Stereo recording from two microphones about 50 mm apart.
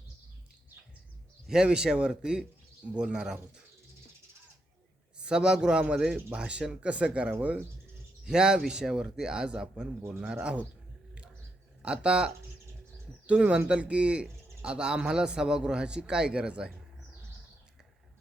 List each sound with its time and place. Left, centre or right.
1.5 s a man's voice: centre
5.1 s a man's voice: centre
8.2 s a man's voice: centre
11.8 s a man's voice: centre